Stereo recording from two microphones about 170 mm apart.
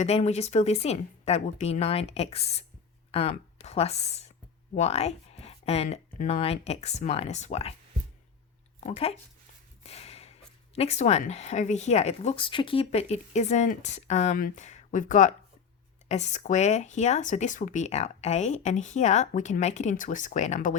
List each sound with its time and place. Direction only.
0.0 s speech: 40° left (ahead or behind)
8.8 s speech: 35° left (ahead or behind)
9.8 s a sound: 40° left (ahead or behind)
10.8 s speech: 40° left (ahead or behind)